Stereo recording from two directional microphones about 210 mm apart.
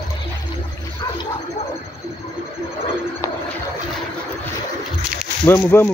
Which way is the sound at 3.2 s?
15° left (ahead or behind).